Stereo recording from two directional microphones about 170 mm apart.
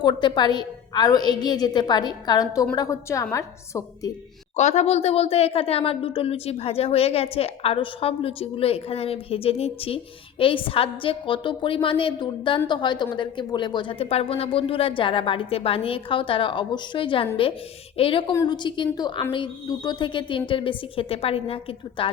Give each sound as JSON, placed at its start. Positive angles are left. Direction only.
{"t": 0.0, "sound": "a woman's voice", "side_deg": 25}
{"t": 4.5, "sound": "a woman's voice", "side_deg": 40}